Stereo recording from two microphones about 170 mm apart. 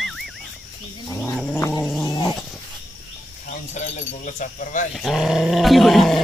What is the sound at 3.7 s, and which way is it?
Speech, 50° left (ahead or behind).